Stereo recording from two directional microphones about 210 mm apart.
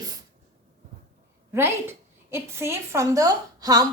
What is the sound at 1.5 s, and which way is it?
A woman's voice, 10° right (ahead or behind).